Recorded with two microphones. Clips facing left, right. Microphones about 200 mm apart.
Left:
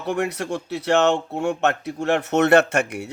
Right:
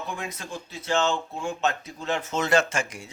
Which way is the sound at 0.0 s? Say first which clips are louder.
Left 10 dB; 70° left (ahead or behind).